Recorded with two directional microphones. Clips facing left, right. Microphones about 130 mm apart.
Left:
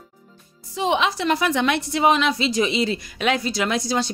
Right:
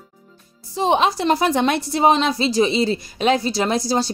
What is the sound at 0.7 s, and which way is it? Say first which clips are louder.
A woman's voice: right 3 dB; 35° right (ahead or behind).